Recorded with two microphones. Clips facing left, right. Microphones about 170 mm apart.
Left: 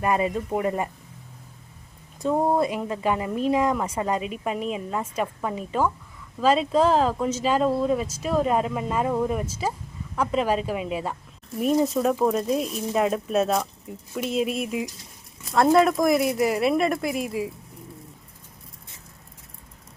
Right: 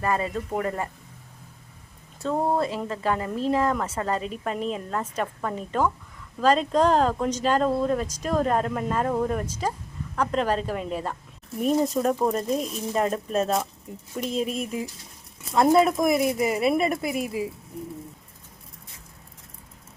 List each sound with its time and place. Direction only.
0.0 s a woman's voice: 15° left (ahead or behind)
2.2 s a woman's voice: 15° left (ahead or behind)
15.6 s speech: 5° right (ahead or behind)